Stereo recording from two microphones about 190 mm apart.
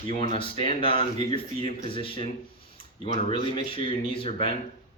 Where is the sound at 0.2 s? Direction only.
30° left (ahead or behind).